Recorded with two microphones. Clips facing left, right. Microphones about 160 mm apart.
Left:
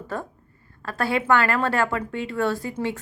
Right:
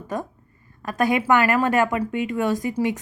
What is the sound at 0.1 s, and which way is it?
A woman's voice, 15° right (ahead or behind).